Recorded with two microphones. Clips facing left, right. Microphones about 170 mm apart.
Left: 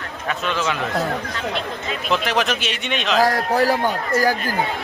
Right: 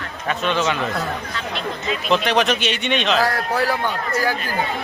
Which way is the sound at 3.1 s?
40° left (ahead or behind).